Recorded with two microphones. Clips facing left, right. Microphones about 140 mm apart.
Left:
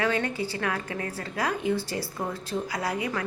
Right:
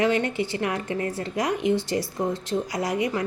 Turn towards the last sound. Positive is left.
turn(degrees=-20)  # may be behind; listen again after turning